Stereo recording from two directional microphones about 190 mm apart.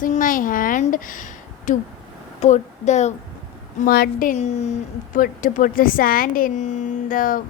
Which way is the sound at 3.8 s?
50° left (ahead or behind).